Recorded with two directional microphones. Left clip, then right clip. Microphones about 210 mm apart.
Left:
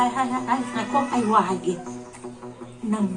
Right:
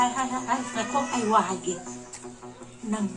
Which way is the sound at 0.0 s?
30° left (ahead or behind).